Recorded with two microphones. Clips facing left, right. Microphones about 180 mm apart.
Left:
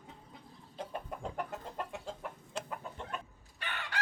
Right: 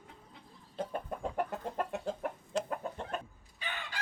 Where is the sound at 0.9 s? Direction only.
45° right (ahead or behind).